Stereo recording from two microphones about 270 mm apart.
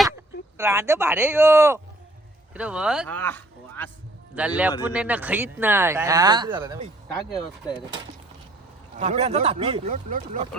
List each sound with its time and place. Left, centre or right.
0.5 s speech: centre
3.2 s speech: centre
4.4 s speech: centre
7.3 s speech: centre
9.0 s speech: right